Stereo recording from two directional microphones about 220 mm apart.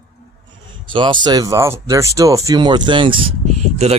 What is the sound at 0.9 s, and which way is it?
Speech, 20° right (ahead or behind).